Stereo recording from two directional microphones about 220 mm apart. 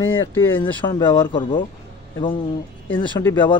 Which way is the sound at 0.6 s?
20° left (ahead or behind).